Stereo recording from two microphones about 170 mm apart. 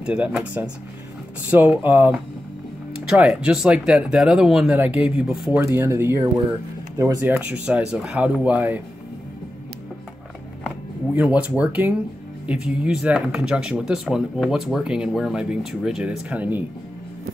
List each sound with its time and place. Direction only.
0.0 s speech: 5° right (ahead or behind)
5.6 s speech: 15° right (ahead or behind)
11.1 s speech: 10° right (ahead or behind)